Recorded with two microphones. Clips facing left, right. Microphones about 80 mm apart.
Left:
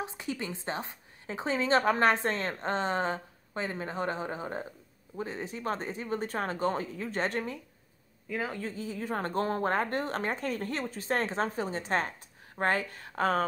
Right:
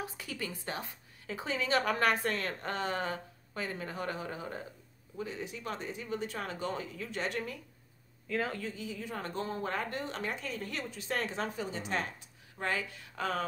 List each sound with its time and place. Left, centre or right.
0.0 s a woman's voice: left
8.3 s speech: centre
8.5 s a woman's voice: left